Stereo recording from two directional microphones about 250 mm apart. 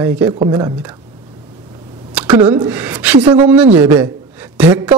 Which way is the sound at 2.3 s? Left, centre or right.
Centre.